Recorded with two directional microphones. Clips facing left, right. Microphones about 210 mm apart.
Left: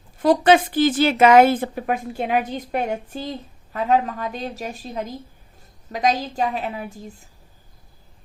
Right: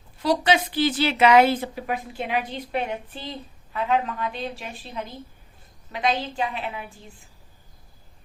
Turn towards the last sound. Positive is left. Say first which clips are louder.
# left 5 dB
turn(degrees=40)  # may be behind; listen again after turning